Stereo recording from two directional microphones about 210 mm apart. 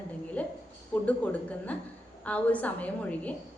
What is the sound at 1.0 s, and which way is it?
A woman's voice, 5° left (ahead or behind).